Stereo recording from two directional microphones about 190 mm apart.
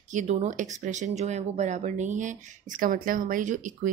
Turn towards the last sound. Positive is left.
turn(degrees=-40)  # may be behind; listen again after turning